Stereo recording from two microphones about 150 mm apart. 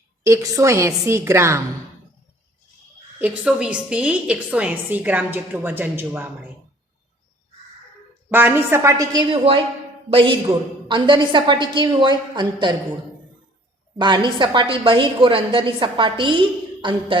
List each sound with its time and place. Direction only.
0.3 s a woman's voice: 20° right (ahead or behind)
3.2 s a woman's voice: 10° right (ahead or behind)
8.3 s a woman's voice: 15° right (ahead or behind)
9.3 s a woman's voice: 35° right (ahead or behind)
14.0 s a woman's voice: 30° right (ahead or behind)